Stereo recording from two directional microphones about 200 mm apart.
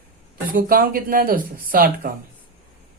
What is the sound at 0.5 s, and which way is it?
Speech, 45° right (ahead or behind).